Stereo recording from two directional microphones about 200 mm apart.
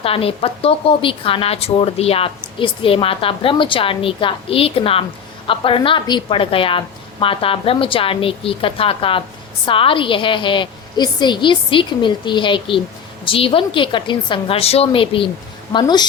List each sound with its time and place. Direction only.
0.0 s a woman's voice: 30° left (ahead or behind)